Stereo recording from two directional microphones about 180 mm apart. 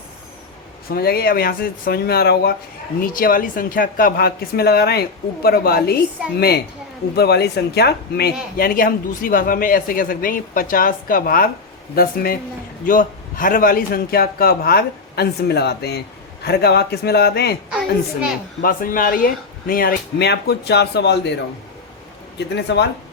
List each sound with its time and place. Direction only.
0.9 s a man's voice: 60° left (ahead or behind)
17.7 s a woman's voice: 5° right (ahead or behind)
18.6 s a man's voice: 50° left (ahead or behind); by 21.3 s 70° left (ahead or behind)
22.4 s speech: 70° left (ahead or behind)